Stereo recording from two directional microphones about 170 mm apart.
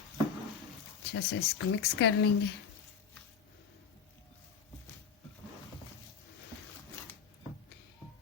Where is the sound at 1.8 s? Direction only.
80° left.